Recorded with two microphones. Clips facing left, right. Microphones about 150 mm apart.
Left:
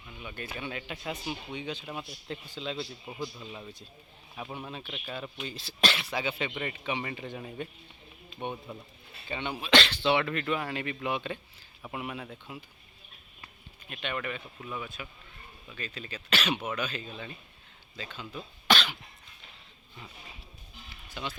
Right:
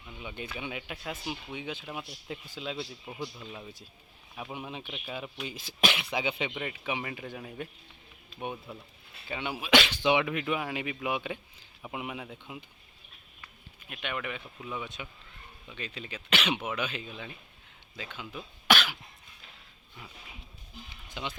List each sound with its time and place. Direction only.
0.2 s a man's voice: 15° right (ahead or behind)
6.5 s a man's voice: 5° right (ahead or behind)
13.9 s speech: 10° right (ahead or behind)
21.1 s speech: 15° right (ahead or behind)